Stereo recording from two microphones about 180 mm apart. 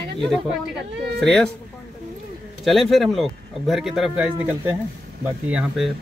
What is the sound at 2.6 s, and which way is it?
Speech, centre (ahead or behind).